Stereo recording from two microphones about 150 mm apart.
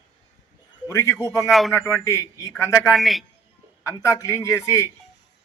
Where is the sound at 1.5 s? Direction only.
Centre (ahead or behind).